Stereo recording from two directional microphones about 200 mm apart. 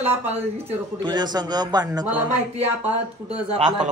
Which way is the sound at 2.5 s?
30° right (ahead or behind).